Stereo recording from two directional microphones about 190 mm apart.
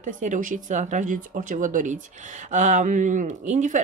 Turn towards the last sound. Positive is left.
turn(degrees=-40)  # may be behind; listen again after turning